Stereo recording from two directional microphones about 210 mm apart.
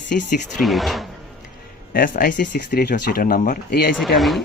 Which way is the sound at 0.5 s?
Centre (ahead or behind).